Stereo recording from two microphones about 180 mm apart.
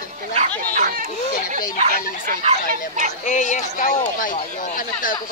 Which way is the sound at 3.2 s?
45° left (ahead or behind).